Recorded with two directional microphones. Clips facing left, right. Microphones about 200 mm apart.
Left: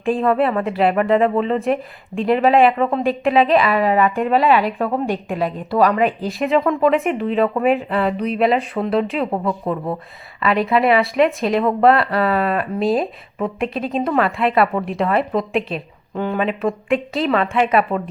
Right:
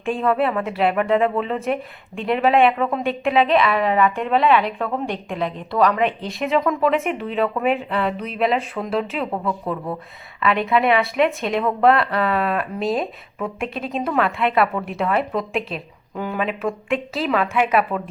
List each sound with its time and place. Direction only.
0.0 s speech: centre (ahead or behind)
9.3 s a woman's voice: 20° left (ahead or behind)
10.4 s speech: centre (ahead or behind)